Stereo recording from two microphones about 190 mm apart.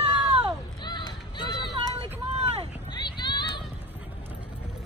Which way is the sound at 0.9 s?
25° left (ahead or behind).